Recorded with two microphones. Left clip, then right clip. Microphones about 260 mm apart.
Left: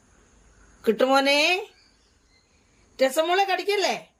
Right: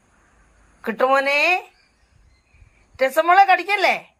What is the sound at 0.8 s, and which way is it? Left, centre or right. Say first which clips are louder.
Speech: right 2 dB; centre.